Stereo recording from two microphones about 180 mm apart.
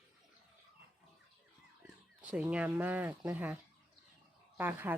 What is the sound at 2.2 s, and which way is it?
Speech, 5° right (ahead or behind).